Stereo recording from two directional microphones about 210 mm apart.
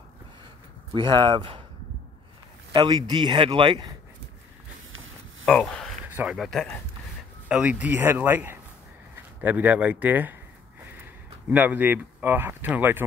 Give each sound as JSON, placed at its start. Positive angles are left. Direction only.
{"t": 0.9, "sound": "speech", "side_deg": -20}
{"t": 2.7, "sound": "speech", "side_deg": -20}
{"t": 5.4, "sound": "speech", "side_deg": 5}
{"t": 6.0, "sound": "speech", "side_deg": -5}
{"t": 11.5, "sound": "speech", "side_deg": -10}